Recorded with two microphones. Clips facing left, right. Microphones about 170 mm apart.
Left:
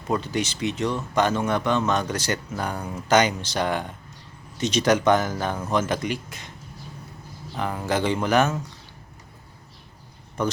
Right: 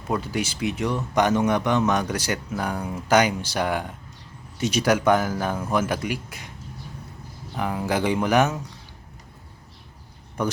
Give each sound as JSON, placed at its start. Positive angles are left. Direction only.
{"t": 0.1, "sound": "speech", "side_deg": -10}
{"t": 7.5, "sound": "speech", "side_deg": -10}